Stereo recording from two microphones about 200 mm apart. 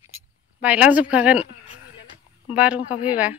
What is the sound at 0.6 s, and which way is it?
Speech, 5° right (ahead or behind).